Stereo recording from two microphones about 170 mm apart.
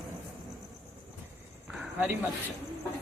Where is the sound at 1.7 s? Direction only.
10° right (ahead or behind).